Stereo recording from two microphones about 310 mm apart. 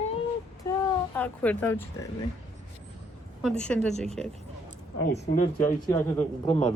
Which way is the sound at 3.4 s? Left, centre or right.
Centre.